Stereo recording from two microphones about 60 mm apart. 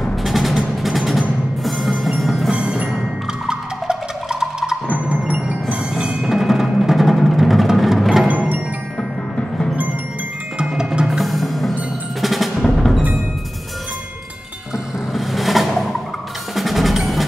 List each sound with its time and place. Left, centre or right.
0.0 s music: centre
2.5 s tubular bells: centre
3.4 s music: centre
5.3 s tubular bells: right
6.2 s music: centre
8.3 s music: right
10.6 s music: centre
15.1 s a sound: centre
16.5 s percussion: centre